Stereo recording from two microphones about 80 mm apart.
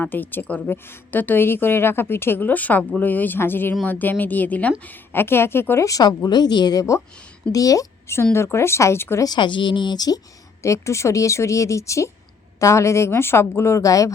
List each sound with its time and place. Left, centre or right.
0.0 s a woman's voice: left
5.8 s speech: left
7.5 s speech: left
8.1 s speech: left
9.2 s speech: left
10.6 s speech: left